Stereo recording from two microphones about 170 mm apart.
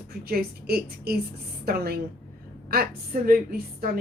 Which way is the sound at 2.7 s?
60° right (ahead or behind).